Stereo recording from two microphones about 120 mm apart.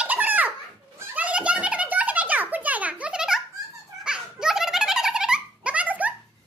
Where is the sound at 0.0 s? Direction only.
15° right (ahead or behind).